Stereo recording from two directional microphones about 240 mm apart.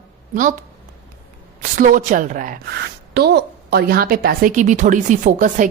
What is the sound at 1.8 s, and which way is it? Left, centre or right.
Speech, right.